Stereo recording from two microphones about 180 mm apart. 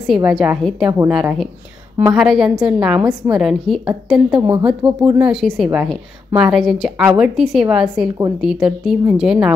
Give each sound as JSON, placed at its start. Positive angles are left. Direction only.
{"t": 0.0, "sound": "a woman's voice", "side_deg": 0}
{"t": 4.4, "sound": "a woman's voice", "side_deg": -20}
{"t": 4.6, "sound": "a woman's voice", "side_deg": -5}